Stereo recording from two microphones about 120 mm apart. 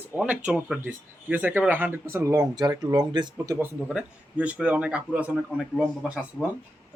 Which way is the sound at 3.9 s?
10° right (ahead or behind).